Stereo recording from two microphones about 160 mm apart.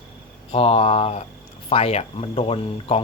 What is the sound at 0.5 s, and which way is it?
Speech, 40° left (ahead or behind).